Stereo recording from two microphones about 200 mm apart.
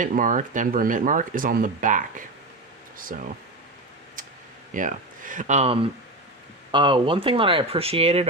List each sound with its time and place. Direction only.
0.0 s speech: 40° right (ahead or behind)
4.7 s speech: 40° right (ahead or behind)